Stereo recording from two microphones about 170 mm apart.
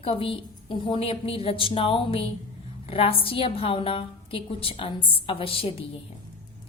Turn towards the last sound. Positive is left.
turn(degrees=35)  # may be behind; listen again after turning